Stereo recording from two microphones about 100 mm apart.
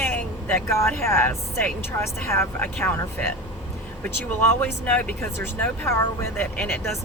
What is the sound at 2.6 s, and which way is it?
Speech, 15° left (ahead or behind).